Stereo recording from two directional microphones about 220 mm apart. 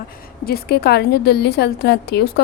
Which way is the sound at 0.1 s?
45° left (ahead or behind).